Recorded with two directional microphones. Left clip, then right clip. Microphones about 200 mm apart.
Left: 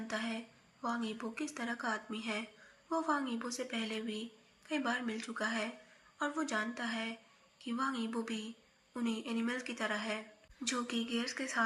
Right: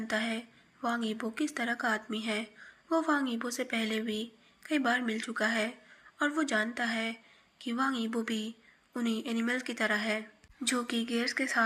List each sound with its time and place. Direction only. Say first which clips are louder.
0.1 s a woman's voice: right 7 dB; 25° right (ahead or behind)